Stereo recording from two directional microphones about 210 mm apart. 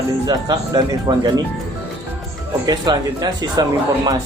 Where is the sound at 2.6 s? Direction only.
20° right (ahead or behind).